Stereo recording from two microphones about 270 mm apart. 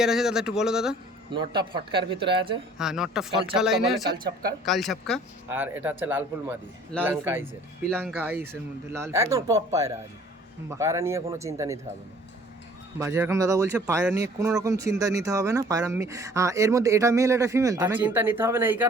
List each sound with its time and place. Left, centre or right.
0.0 s speech: centre
1.3 s speech: centre
2.7 s speech: centre
7.9 s speech: centre
8.2 s speech: centre
13.0 s speech: centre